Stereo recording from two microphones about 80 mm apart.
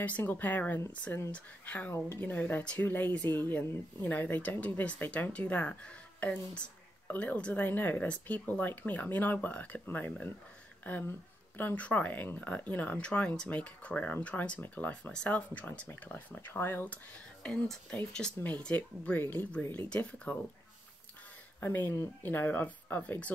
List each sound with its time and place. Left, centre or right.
0.2 s speech: left
1.3 s speech: centre
17.9 s speech: centre
21.5 s speech: left